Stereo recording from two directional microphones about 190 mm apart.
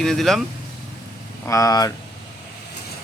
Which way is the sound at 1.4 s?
15° left (ahead or behind).